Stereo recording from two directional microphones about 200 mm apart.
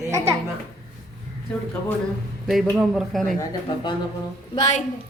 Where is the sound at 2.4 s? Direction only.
Centre (ahead or behind).